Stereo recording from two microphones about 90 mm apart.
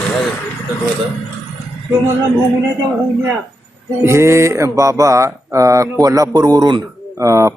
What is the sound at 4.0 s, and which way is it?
Speech, 30° right (ahead or behind).